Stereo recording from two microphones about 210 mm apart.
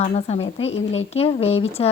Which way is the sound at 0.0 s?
30° left (ahead or behind).